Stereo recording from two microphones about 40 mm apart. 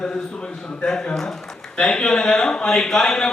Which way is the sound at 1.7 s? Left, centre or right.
Left.